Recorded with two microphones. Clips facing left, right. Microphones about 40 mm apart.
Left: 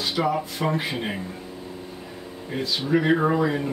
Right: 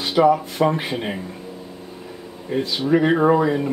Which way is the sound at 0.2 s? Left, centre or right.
Centre.